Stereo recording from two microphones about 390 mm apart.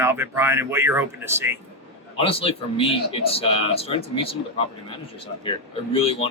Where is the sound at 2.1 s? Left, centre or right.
Centre.